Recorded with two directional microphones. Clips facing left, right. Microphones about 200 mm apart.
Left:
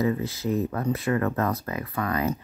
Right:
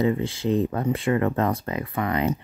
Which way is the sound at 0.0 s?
25° right (ahead or behind).